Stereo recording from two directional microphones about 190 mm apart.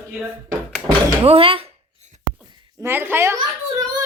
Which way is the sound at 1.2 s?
30° right (ahead or behind).